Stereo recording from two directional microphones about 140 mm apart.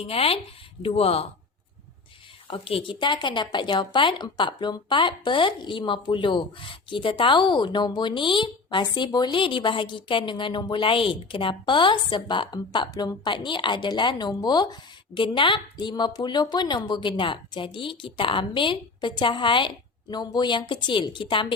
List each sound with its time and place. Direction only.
0.0 s speech: 45° left (ahead or behind)
2.5 s a woman's voice: 40° left (ahead or behind)